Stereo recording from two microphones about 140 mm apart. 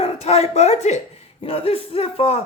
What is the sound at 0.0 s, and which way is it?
A woman's voice, 50° left (ahead or behind).